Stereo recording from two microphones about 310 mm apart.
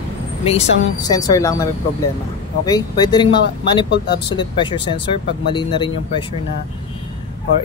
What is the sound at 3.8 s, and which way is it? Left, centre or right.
Speech, left.